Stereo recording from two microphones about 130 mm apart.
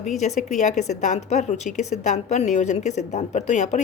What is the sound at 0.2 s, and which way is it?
A woman's voice, 65° left (ahead or behind).